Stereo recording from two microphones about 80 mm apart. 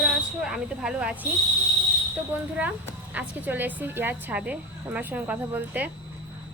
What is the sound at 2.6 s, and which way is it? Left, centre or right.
A woman's voice, centre.